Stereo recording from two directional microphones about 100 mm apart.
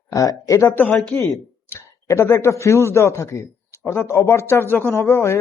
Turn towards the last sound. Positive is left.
turn(degrees=30)  # may be behind; listen again after turning